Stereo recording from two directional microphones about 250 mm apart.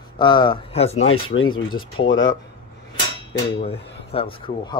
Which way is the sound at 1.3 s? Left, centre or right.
Left.